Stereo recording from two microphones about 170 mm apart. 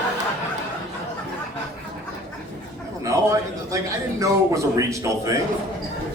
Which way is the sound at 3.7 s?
20° right (ahead or behind).